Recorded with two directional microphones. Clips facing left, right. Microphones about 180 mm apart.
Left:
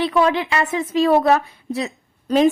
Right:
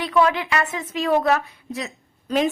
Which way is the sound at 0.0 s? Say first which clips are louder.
Left 2 dB; 30° left (ahead or behind).